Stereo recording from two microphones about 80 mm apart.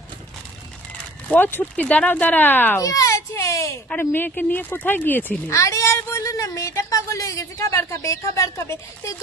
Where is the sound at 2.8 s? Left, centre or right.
Left.